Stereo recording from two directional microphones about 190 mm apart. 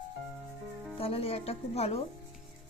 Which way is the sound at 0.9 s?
30° left (ahead or behind).